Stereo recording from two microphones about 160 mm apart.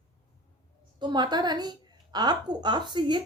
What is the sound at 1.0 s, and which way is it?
A woman's voice, 25° right (ahead or behind).